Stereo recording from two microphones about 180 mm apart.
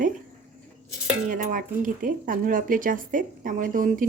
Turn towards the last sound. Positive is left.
turn(degrees=-50)  # may be behind; listen again after turning